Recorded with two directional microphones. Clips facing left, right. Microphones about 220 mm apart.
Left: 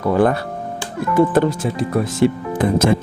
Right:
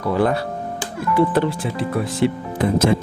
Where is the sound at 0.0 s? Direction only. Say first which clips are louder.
Left 3 dB; 50° left (ahead or behind).